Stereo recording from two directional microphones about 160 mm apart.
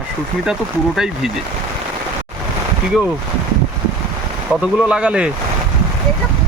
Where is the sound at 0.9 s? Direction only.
5° right (ahead or behind).